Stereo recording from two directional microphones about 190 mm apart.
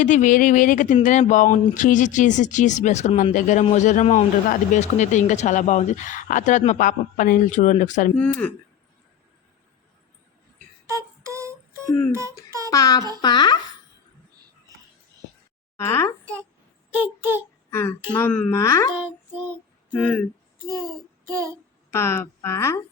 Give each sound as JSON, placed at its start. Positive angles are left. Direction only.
{"t": 0.0, "sound": "speech", "side_deg": 40}
{"t": 8.2, "sound": "speech", "side_deg": 10}
{"t": 10.8, "sound": "music", "side_deg": -15}
{"t": 12.5, "sound": "a sound", "side_deg": -15}
{"t": 12.7, "sound": "a sound", "side_deg": 20}
{"t": 15.8, "sound": "speech", "side_deg": 15}
{"t": 16.9, "sound": "a child's voice", "side_deg": -10}
{"t": 17.7, "sound": "speech", "side_deg": 10}
{"t": 19.9, "sound": "speech", "side_deg": 5}
{"t": 21.2, "sound": "speech", "side_deg": -15}
{"t": 21.8, "sound": "speech", "side_deg": 15}